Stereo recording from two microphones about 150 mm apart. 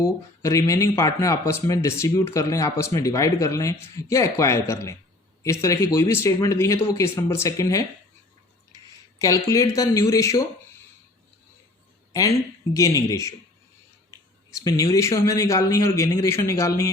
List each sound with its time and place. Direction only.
0.0 s speech: 20° left (ahead or behind)
9.1 s speech: 20° left (ahead or behind)
12.7 s speech: 20° left (ahead or behind)
14.6 s speech: 25° left (ahead or behind)